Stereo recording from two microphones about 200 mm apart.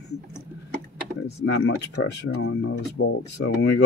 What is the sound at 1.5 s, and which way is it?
Speech, 85° left.